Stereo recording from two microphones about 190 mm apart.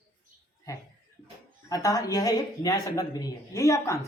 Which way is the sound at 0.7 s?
15° left (ahead or behind).